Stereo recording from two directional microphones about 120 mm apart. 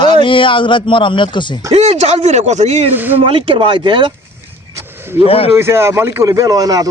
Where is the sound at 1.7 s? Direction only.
65° right (ahead or behind).